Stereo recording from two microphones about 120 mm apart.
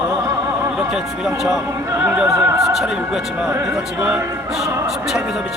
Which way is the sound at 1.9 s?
15° right (ahead or behind).